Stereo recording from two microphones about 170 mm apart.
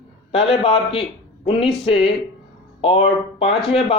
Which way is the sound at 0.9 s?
35° left (ahead or behind).